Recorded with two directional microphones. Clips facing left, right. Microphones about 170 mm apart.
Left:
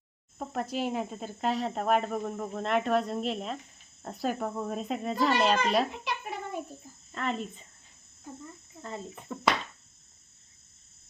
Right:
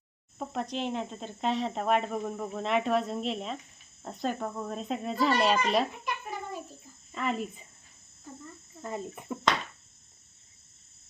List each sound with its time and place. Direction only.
0.3 s speech: centre (ahead or behind)
6.1 s cat: 65° left (ahead or behind)
7.1 s speech: 5° right (ahead or behind)
8.8 s speech: 15° right (ahead or behind)